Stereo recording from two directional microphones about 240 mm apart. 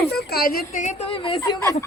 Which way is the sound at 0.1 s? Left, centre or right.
Left.